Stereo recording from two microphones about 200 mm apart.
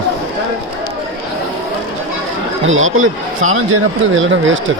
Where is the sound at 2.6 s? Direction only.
80° right.